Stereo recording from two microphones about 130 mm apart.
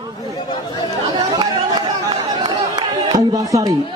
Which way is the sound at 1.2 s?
35° right (ahead or behind).